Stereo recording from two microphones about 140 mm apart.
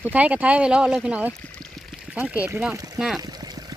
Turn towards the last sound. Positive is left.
turn(degrees=-25)  # may be behind; listen again after turning